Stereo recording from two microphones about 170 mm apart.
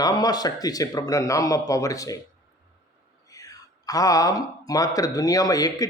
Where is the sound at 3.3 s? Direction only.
20° left (ahead or behind).